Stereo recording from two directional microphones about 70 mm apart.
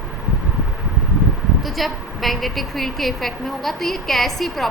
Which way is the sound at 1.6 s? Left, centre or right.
Centre.